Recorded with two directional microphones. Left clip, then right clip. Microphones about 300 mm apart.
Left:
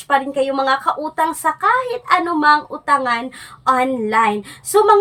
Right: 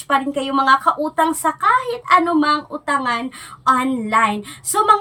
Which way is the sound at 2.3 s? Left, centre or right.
Centre.